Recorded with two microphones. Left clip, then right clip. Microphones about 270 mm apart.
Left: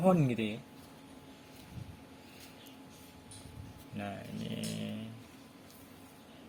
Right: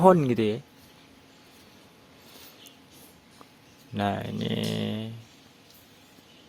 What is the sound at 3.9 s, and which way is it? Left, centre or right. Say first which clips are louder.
Speech: right 13 dB; right.